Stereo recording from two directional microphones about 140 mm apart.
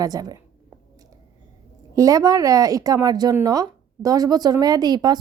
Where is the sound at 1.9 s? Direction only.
25° right (ahead or behind).